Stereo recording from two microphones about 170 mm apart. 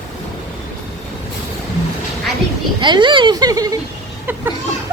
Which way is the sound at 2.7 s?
25° right (ahead or behind).